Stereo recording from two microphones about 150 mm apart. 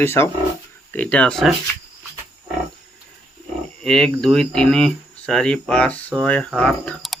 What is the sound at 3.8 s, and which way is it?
Speech, 5° left (ahead or behind).